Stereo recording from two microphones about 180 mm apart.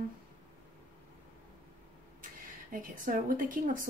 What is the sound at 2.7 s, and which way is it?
Speech, 50° right (ahead or behind).